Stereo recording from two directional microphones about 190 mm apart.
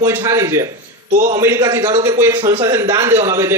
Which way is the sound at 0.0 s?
15° right (ahead or behind).